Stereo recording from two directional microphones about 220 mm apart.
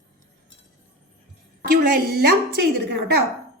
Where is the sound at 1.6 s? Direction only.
45° right (ahead or behind).